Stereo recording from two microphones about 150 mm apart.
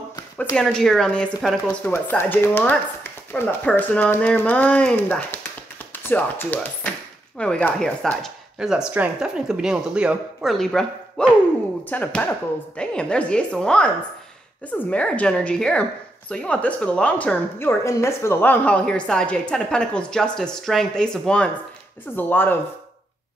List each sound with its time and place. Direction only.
0.1 s a sound: 20° left (ahead or behind)
0.6 s speech: 5° left (ahead or behind)
1.9 s a woman's voice: 15° left (ahead or behind)